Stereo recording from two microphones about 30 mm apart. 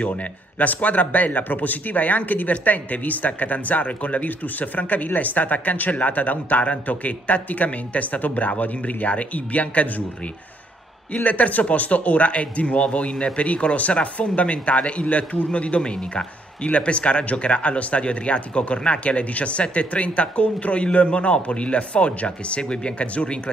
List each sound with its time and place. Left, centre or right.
0.2 s speech: left
11.1 s speech: left
15.8 s speech: left
16.6 s speech: left
17.2 s speech: left
17.5 s speech: left